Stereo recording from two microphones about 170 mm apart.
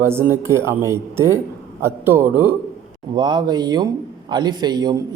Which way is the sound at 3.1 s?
25° right (ahead or behind).